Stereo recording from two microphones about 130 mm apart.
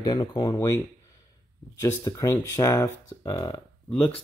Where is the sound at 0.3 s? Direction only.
35° left (ahead or behind).